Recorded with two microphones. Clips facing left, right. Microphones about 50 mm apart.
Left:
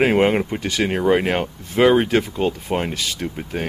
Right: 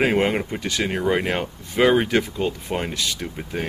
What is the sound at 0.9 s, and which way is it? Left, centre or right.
Speech, left.